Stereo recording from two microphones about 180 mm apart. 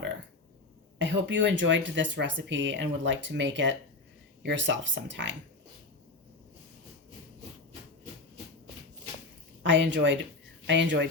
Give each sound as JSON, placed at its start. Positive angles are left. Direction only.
{"t": 0.9, "sound": "speech", "side_deg": -90}
{"t": 9.6, "sound": "speech", "side_deg": -90}